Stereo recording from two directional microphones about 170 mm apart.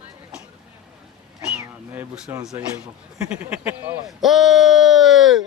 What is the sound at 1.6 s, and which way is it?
Speech, 10° right (ahead or behind).